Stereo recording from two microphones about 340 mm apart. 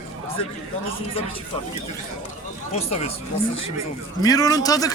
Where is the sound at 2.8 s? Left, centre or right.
Centre.